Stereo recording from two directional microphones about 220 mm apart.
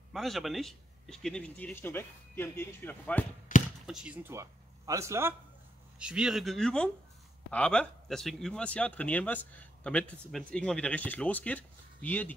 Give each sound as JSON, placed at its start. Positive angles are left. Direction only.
{"t": 0.1, "sound": "speech", "side_deg": 0}
{"t": 3.5, "sound": "basketball bounce", "side_deg": 40}
{"t": 3.8, "sound": "speech", "side_deg": -5}